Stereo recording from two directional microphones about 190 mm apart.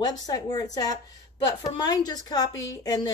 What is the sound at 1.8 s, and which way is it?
A woman's voice, 20° left (ahead or behind).